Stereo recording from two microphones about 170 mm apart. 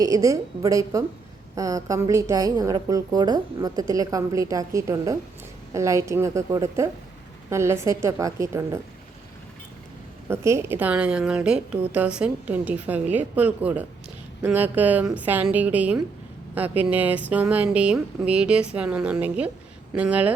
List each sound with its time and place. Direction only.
0.0 s a woman's voice: 20° right (ahead or behind)
10.2 s a woman's voice: 15° right (ahead or behind)